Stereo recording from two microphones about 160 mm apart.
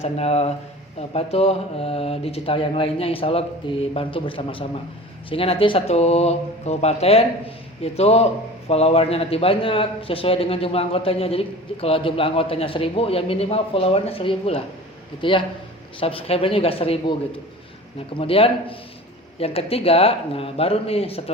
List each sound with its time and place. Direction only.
0.0 s speech: 40° left (ahead or behind)